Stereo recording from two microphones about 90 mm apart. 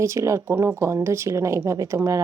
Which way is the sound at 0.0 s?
35° right (ahead or behind).